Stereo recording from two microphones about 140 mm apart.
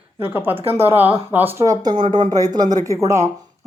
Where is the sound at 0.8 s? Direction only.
15° right (ahead or behind).